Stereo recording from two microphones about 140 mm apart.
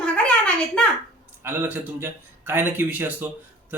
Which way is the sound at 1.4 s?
15° right (ahead or behind).